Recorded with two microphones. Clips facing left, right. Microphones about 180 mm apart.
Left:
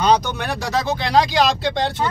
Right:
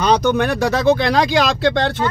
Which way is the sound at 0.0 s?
55° right (ahead or behind).